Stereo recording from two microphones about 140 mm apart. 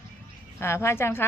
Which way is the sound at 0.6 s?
20° left (ahead or behind).